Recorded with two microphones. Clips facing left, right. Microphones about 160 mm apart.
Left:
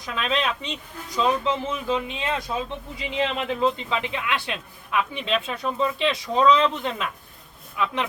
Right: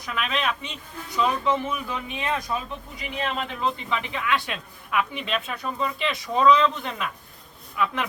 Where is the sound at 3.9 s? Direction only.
20° left (ahead or behind).